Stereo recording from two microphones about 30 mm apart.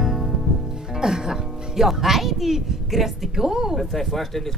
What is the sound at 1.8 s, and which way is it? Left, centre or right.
A woman's voice, centre.